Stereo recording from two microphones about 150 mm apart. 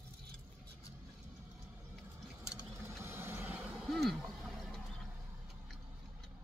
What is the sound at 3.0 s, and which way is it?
Vehicle, 15° right (ahead or behind).